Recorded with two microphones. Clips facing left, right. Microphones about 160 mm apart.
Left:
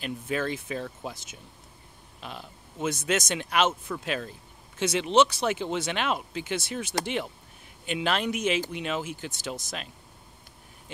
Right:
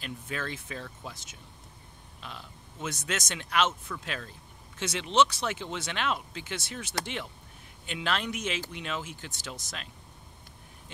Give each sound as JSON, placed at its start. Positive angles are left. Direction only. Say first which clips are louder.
{"t": 0.0, "sound": "speech", "louder": "left 7 dB", "side_deg": 15}
{"t": 2.8, "sound": "speech", "louder": "left 7 dB", "side_deg": 20}
{"t": 5.1, "sound": "speech", "louder": "left 3 dB", "side_deg": 50}
{"t": 5.7, "sound": "speech", "louder": "left 4 dB", "side_deg": 15}